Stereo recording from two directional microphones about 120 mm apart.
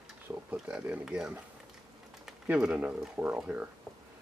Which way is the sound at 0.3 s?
10° right (ahead or behind).